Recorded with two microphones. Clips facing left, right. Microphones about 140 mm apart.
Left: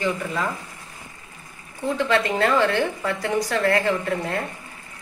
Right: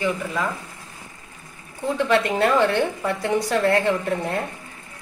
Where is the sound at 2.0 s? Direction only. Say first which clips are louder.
Right 2 dB; 15° right (ahead or behind).